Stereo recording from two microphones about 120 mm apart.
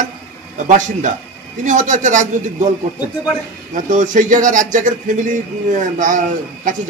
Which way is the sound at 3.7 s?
90° right.